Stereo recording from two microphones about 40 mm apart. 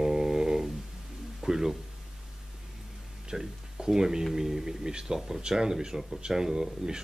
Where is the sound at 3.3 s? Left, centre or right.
Centre.